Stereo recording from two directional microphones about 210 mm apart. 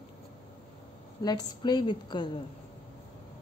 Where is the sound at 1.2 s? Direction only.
20° left (ahead or behind).